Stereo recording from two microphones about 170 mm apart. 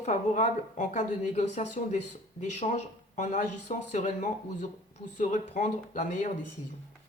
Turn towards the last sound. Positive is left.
turn(degrees=45)  # may be behind; listen again after turning